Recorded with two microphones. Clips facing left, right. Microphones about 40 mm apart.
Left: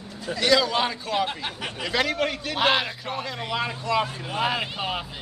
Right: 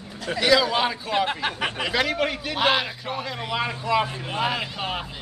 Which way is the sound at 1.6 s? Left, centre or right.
Right.